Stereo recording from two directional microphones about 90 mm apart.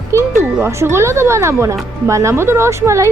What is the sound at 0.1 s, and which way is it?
Speech, 30° right (ahead or behind).